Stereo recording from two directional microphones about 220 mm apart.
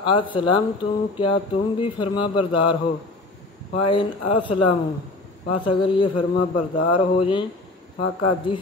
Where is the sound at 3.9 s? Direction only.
25° left (ahead or behind).